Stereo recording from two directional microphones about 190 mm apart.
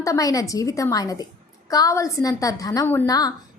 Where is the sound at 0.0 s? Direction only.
20° left (ahead or behind).